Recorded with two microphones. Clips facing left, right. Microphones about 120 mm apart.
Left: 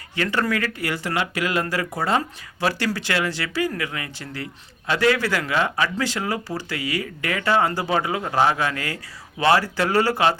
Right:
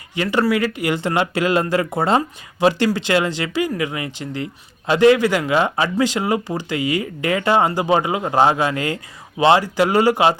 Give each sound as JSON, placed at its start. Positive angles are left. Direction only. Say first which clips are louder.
{"t": 0.2, "sound": "speech", "louder": "right 5 dB", "side_deg": -15}